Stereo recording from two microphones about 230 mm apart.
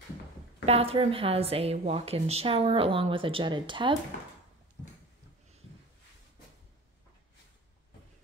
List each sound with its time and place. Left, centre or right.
0.7 s a woman's voice: right